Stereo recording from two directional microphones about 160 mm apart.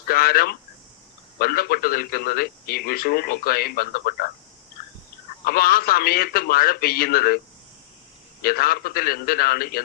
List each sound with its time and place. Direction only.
0.1 s a man's voice: 70° left (ahead or behind)
5.5 s a man's voice: 70° left (ahead or behind)